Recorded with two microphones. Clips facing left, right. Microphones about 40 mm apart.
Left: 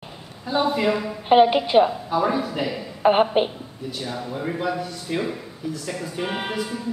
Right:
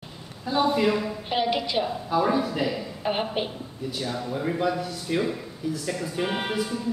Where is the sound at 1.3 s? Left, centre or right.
Left.